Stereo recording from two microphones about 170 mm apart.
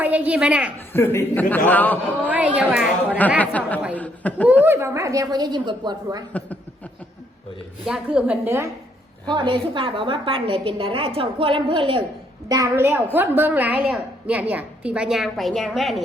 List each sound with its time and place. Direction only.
0.0 s a woman's voice: 10° right (ahead or behind)
0.9 s a man's voice: 15° left (ahead or behind)
2.6 s a woman's voice: 5° right (ahead or behind)
3.2 s a man's voice: 10° left (ahead or behind)
4.6 s a woman's voice: 15° right (ahead or behind)
7.9 s a woman's voice: 5° right (ahead or behind)
9.2 s a woman's voice: 25° right (ahead or behind)
12.5 s a woman's voice: 20° right (ahead or behind); by 16.0 s centre (ahead or behind)